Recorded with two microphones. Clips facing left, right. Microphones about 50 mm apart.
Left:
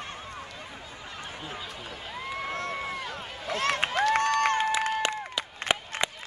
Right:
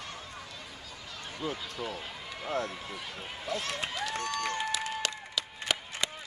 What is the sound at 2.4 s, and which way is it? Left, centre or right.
Speech, left.